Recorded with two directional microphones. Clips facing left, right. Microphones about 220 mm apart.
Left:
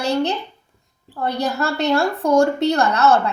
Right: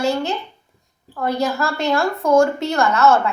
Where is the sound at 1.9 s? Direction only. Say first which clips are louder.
Right 1 dB; 35° left (ahead or behind).